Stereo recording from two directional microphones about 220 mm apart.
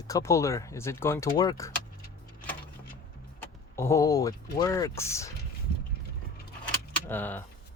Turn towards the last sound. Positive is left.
turn(degrees=10)  # may be behind; listen again after turning